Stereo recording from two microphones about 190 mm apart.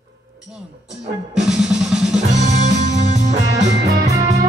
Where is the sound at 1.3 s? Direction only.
5° right (ahead or behind).